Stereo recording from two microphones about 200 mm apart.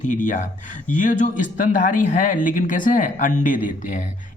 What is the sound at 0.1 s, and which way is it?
Speech, 40° left (ahead or behind).